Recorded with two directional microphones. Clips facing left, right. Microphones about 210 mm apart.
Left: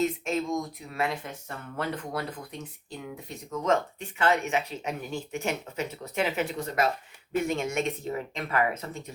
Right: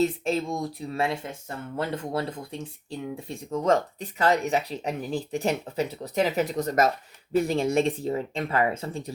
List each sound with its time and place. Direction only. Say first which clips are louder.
0.0 s speech: right 3 dB; 30° right (ahead or behind)